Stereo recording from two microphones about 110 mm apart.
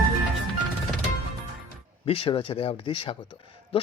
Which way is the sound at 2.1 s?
60° left (ahead or behind).